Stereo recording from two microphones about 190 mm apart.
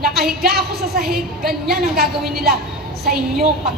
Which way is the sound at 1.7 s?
55° right (ahead or behind).